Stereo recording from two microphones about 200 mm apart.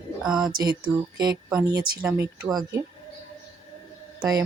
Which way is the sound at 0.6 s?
20° right (ahead or behind).